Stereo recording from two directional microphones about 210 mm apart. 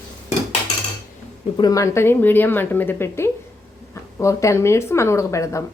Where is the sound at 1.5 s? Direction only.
20° left (ahead or behind).